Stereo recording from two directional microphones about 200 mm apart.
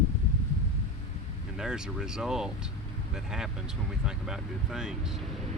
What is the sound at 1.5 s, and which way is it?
Speech, 5° right (ahead or behind).